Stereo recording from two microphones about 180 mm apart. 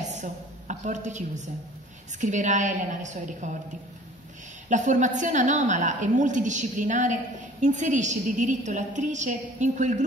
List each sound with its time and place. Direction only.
0.2 s a woman's voice: 45° right (ahead or behind)
4.6 s a woman's voice: 45° right (ahead or behind)